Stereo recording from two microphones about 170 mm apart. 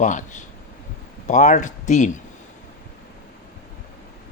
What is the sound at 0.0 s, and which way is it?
A man's voice, 45° left (ahead or behind).